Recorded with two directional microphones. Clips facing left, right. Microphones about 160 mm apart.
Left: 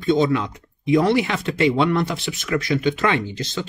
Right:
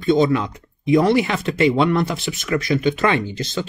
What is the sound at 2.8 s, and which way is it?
Speech, 45° right (ahead or behind).